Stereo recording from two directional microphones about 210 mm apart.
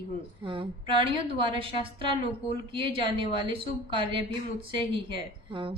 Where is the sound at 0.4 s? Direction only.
25° right (ahead or behind).